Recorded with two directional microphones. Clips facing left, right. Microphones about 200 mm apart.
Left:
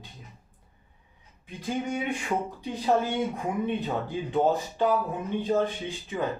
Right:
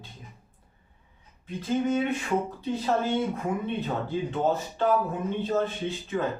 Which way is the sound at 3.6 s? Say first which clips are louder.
Left 1 dB; 15° left (ahead or behind).